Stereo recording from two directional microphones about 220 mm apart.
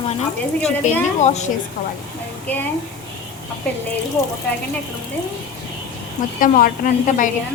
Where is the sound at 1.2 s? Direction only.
30° left (ahead or behind).